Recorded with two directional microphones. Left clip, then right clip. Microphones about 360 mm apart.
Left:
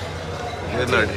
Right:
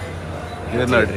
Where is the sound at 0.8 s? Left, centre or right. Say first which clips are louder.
Right 3 dB; centre.